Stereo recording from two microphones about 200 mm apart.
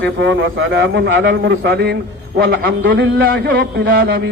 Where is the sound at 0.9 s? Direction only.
70° right (ahead or behind).